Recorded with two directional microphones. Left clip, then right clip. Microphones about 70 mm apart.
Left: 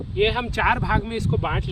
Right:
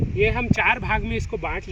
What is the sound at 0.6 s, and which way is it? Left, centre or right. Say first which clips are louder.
Speech: even; centre.